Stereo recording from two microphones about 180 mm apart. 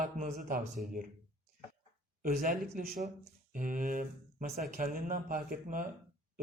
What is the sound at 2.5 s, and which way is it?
A man's voice, 50° right (ahead or behind).